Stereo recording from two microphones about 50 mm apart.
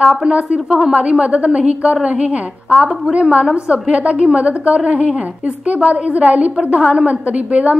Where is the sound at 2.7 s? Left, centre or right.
Right.